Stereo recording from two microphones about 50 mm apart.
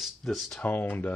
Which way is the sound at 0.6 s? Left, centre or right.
Left.